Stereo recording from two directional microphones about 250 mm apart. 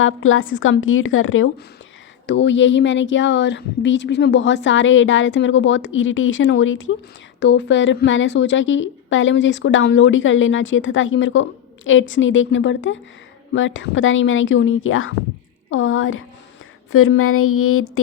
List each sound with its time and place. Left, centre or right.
0.0 s a woman's voice: left